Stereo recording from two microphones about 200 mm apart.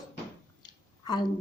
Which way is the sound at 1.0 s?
20° left (ahead or behind).